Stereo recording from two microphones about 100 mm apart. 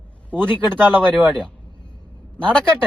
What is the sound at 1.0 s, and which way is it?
Speech, 15° right (ahead or behind).